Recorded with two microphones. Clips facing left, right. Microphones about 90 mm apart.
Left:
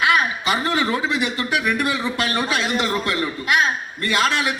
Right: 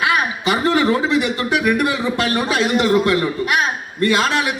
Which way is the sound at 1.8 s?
25° right (ahead or behind).